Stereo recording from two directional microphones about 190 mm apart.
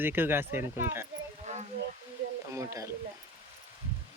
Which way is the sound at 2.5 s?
15° right (ahead or behind).